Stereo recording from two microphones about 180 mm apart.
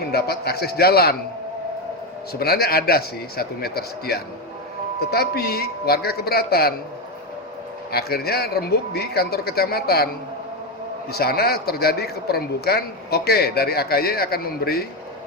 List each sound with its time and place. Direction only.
0.1 s speech: 60° left (ahead or behind)
2.3 s speech: 60° left (ahead or behind)
7.9 s speech: 60° left (ahead or behind)
11.1 s speech: 60° left (ahead or behind)